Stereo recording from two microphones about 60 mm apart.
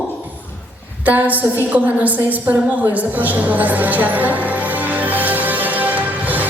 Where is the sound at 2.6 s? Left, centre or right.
Right.